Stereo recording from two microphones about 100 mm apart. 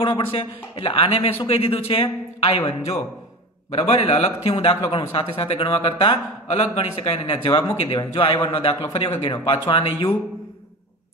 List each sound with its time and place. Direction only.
0.0 s a man's voice: 60° left (ahead or behind); by 3.0 s 80° left
3.7 s a man's voice: 90° left; by 10.1 s 55° left (ahead or behind)